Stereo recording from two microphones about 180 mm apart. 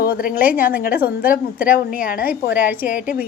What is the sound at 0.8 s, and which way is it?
A woman's voice, 55° left (ahead or behind).